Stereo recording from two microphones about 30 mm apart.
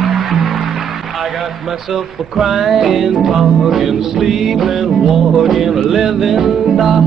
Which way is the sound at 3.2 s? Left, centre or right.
Centre.